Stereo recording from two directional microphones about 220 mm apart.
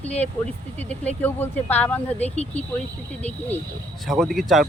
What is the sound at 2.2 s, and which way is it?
Speech, 30° left (ahead or behind).